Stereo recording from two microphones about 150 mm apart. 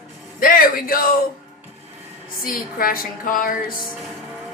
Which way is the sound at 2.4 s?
75° left (ahead or behind).